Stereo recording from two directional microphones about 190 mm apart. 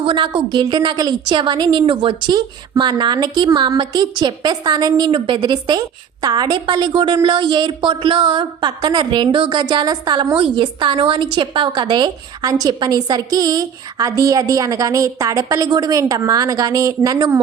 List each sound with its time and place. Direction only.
0.0 s a woman's voice: 30° right (ahead or behind)